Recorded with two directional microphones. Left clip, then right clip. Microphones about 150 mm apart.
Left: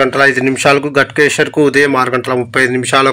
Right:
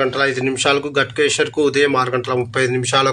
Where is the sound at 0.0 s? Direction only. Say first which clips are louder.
Left 7 dB; 35° left (ahead or behind).